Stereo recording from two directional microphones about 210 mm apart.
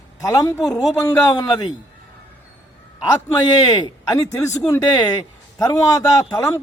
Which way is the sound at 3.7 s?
20° left (ahead or behind).